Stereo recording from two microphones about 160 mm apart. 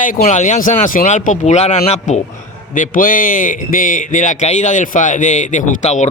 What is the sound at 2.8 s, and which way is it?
A man's voice, 60° left (ahead or behind).